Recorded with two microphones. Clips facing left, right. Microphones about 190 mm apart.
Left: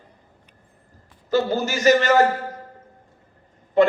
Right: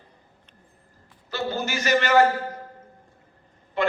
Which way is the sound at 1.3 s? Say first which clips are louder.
Left 7 dB; 45° left (ahead or behind).